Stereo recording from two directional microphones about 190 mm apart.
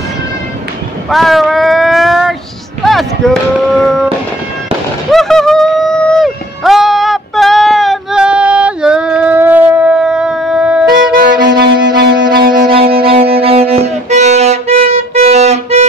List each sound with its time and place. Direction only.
1.1 s a sound: centre (ahead or behind)
5.1 s music: centre (ahead or behind)
11.1 s music: 50° right (ahead or behind)
12.4 s music: 30° right (ahead or behind)